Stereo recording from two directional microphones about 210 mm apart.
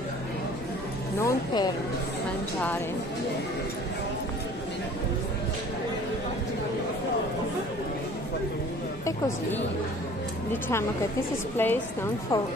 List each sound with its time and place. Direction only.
1.2 s speech: 20° left (ahead or behind)
10.5 s a woman's voice: 10° left (ahead or behind)